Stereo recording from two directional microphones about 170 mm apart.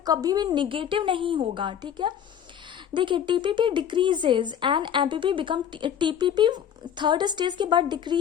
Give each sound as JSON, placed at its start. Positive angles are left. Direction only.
{"t": 0.0, "sound": "speech", "side_deg": -25}